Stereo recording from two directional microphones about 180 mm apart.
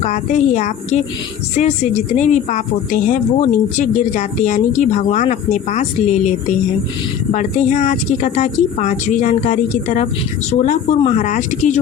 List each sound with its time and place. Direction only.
0.0 s a woman's voice: 40° left (ahead or behind)
7.3 s a woman's voice: 45° left (ahead or behind)